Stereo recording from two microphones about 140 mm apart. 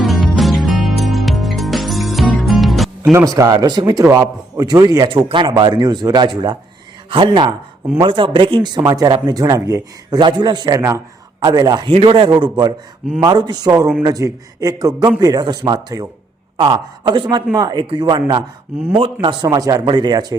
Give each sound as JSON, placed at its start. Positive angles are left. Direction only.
{"t": 0.0, "sound": "music", "side_deg": 0}
{"t": 3.0, "sound": "a man's voice", "side_deg": -20}
{"t": 11.9, "sound": "a man's voice", "side_deg": -45}